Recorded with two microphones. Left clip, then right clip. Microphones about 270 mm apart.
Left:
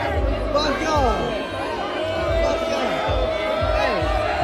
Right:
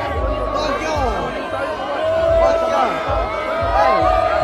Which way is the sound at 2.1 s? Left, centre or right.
Centre.